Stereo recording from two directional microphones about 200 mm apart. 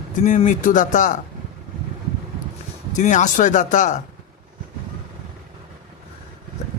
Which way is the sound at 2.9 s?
40° left (ahead or behind).